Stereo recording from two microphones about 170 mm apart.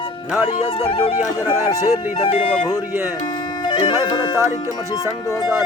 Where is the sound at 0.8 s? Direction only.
35° left (ahead or behind).